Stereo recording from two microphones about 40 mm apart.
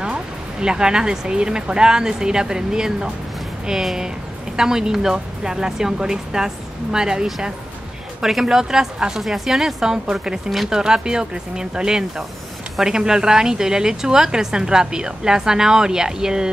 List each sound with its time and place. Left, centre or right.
0.1 s speech: right